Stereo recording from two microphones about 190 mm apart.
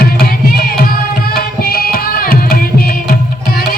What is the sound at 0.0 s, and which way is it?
Music, 50° left (ahead or behind).